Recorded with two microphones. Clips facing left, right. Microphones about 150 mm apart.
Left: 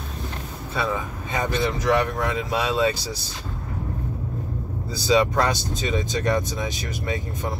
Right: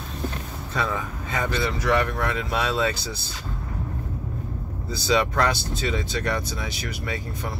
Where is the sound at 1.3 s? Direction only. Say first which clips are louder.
Left 2 dB; 20° left (ahead or behind).